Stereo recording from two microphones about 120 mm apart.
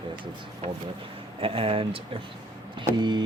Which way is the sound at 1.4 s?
50° right (ahead or behind).